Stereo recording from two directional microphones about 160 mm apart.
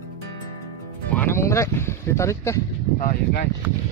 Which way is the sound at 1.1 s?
15° left (ahead or behind).